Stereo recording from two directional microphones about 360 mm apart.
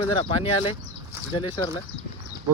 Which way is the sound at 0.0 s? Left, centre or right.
Centre.